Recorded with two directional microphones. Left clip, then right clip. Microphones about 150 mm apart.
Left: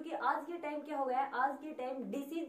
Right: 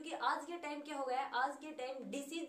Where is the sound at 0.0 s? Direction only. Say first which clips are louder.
Left 3 dB; 20° right (ahead or behind).